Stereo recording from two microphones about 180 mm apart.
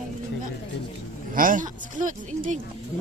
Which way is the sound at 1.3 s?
50° right (ahead or behind).